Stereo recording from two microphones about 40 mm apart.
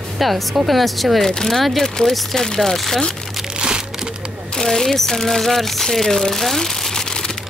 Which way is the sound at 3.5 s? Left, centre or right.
Centre.